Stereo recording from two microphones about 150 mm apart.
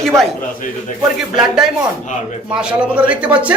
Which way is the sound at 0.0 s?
5° left (ahead or behind).